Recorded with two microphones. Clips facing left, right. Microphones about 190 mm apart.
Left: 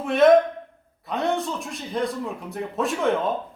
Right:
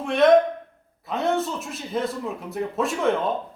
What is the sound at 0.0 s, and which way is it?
A man's voice, centre (ahead or behind).